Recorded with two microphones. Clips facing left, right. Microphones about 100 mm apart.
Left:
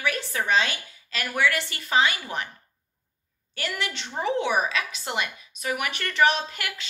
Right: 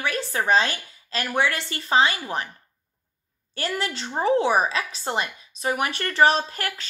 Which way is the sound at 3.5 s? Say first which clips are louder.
Right 3 dB; 35° right (ahead or behind).